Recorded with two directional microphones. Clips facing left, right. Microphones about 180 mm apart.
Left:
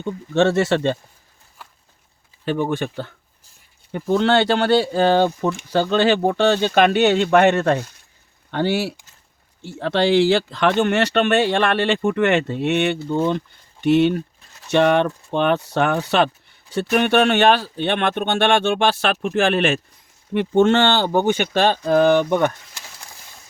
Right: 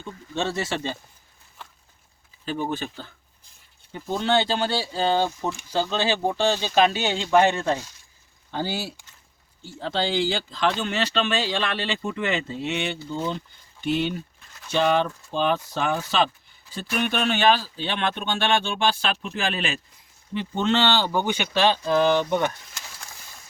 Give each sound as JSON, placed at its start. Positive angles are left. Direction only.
{"t": 0.0, "sound": "speech", "side_deg": 70}
{"t": 2.4, "sound": "speech", "side_deg": 65}